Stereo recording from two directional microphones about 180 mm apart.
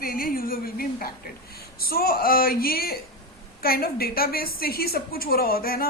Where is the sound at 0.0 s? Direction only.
55° left (ahead or behind).